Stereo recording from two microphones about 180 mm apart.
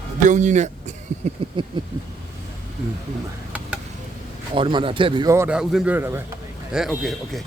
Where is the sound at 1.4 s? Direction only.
30° right (ahead or behind).